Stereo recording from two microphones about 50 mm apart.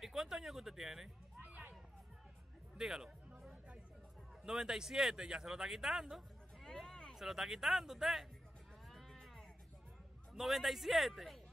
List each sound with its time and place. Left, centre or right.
0.0 s music: centre
1.4 s a sound: right
2.8 s speech: centre
4.5 s speech: centre
6.6 s a sound: centre
7.2 s speech: centre
8.8 s music: centre
10.3 s speech: centre